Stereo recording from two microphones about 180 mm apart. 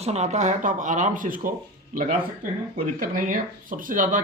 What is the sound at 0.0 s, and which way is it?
Speech, 40° right (ahead or behind).